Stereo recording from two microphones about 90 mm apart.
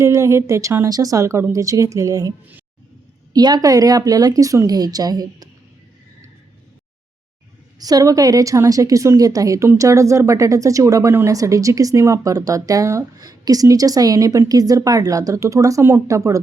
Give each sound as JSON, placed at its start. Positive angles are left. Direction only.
{"t": 0.0, "sound": "speech", "side_deg": -35}
{"t": 0.9, "sound": "speech", "side_deg": -40}
{"t": 3.3, "sound": "a woman's voice", "side_deg": -45}
{"t": 7.8, "sound": "speech", "side_deg": -45}